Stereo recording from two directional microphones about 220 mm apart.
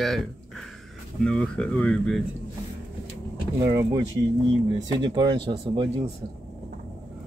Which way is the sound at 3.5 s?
15° right (ahead or behind).